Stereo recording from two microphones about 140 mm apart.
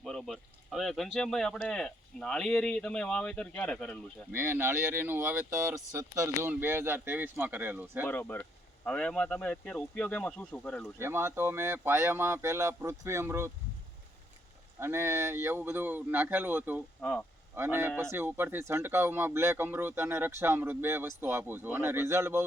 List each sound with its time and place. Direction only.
0.0 s speech: centre (ahead or behind)
4.3 s speech: 15° right (ahead or behind)
8.0 s speech: 15° left (ahead or behind)
10.9 s speech: 20° right (ahead or behind)
14.8 s speech: 20° right (ahead or behind)
17.0 s speech: 10° left (ahead or behind)
17.5 s speech: 15° right (ahead or behind)